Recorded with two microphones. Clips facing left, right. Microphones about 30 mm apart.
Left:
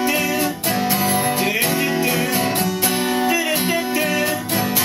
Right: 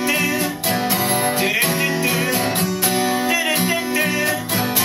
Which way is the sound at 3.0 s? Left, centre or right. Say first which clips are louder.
Even; right.